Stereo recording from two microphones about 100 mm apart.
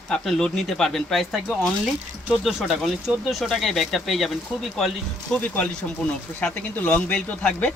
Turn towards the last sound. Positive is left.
turn(degrees=10)  # may be behind; listen again after turning